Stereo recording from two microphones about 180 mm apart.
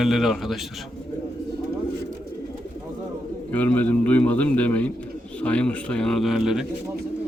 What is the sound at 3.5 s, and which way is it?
A man's voice, 10° left (ahead or behind).